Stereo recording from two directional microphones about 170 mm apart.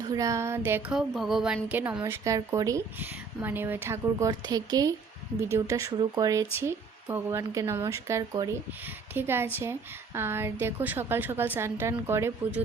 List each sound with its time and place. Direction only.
0.1 s speech: 20° right (ahead or behind); by 1.8 s 5° right (ahead or behind)
2.0 s speech: 15° right (ahead or behind)